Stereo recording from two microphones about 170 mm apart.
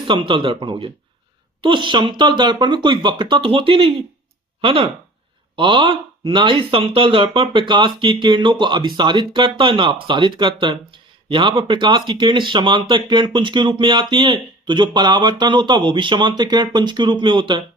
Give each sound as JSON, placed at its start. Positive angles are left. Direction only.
{"t": 0.1, "sound": "speech", "side_deg": -30}